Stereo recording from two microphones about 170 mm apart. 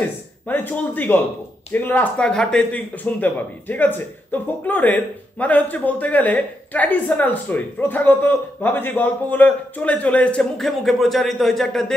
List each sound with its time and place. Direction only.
0.5 s speech: 10° left (ahead or behind)